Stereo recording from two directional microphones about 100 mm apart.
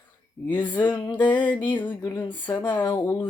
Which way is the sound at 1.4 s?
20° left (ahead or behind).